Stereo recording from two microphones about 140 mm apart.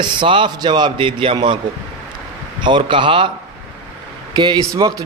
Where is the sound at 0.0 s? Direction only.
35° right (ahead or behind).